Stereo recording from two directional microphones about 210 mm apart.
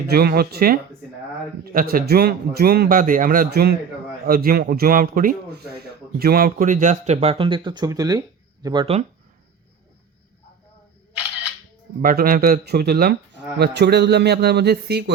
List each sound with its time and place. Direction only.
0.1 s a man's voice: 45° right (ahead or behind); by 9.0 s 25° right (ahead or behind)
11.2 s single-lens reflex camera: 5° right (ahead or behind)
12.0 s a man's voice: 45° right (ahead or behind)